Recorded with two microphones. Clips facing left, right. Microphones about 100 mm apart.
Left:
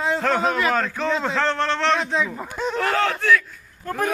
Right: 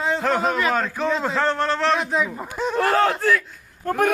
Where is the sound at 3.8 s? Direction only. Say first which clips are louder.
Right 4 dB; 60° right (ahead or behind).